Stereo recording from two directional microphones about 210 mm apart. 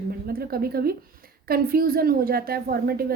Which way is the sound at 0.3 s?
45° right (ahead or behind).